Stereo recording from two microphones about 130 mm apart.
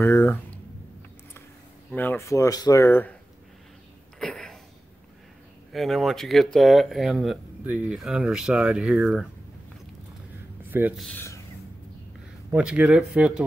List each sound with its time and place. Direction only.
0.0 s a sound: 15° left (ahead or behind)
2.0 s speech: 15° left (ahead or behind)
4.2 s a sound: 5° left (ahead or behind)
5.7 s speech: centre (ahead or behind)
10.7 s speech: 15° right (ahead or behind)
11.1 s speech: 20° left (ahead or behind)
12.4 s speech: 10° right (ahead or behind)